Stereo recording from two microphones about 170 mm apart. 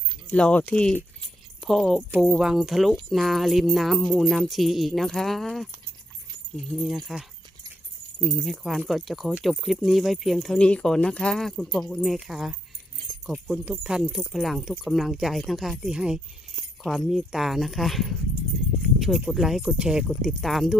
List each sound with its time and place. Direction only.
0.3 s speech: 5° left (ahead or behind)
6.7 s speech: centre (ahead or behind)